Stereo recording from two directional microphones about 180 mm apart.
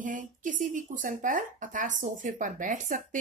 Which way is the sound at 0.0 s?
45° right (ahead or behind).